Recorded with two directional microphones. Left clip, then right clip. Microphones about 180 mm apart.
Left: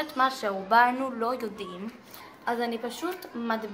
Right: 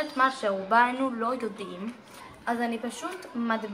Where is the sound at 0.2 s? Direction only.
25° left (ahead or behind).